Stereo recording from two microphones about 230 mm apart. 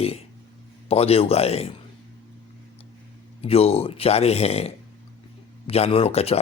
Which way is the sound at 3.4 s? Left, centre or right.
Left.